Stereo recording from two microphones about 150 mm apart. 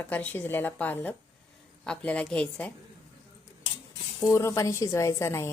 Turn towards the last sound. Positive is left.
turn(degrees=20)  # may be behind; listen again after turning